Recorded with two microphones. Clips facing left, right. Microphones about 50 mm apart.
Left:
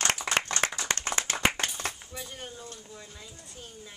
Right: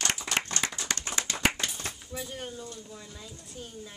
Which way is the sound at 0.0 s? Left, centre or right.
Left.